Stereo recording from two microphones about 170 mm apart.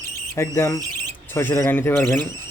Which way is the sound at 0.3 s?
15° left (ahead or behind).